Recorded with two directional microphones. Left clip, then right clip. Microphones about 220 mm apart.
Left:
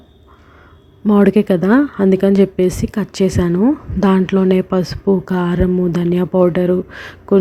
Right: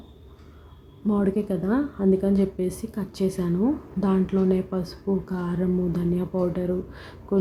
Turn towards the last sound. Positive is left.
turn(degrees=35)  # may be behind; listen again after turning